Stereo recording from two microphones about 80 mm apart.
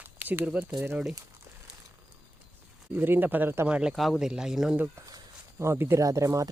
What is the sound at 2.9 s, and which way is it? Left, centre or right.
Speech, right.